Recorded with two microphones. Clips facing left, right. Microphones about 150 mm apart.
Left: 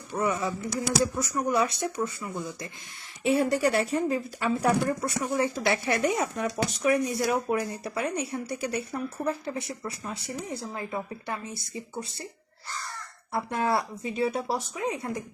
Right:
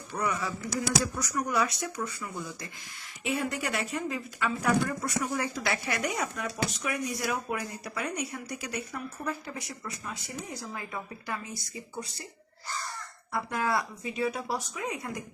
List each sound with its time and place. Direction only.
0.1 s speech: 25° left (ahead or behind)
3.2 s speech: 35° left (ahead or behind)
13.3 s speech: 30° left (ahead or behind)